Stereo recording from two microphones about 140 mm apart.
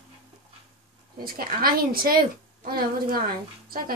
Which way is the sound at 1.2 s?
90° right.